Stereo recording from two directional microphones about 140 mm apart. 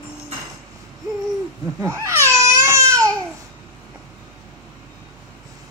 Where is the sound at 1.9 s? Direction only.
20° right (ahead or behind).